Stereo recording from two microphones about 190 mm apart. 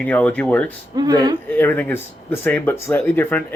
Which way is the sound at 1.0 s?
20° right (ahead or behind).